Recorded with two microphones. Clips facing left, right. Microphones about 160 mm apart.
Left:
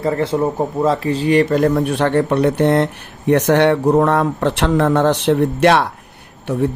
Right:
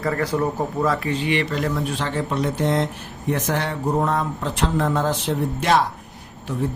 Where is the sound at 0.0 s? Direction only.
25° left (ahead or behind).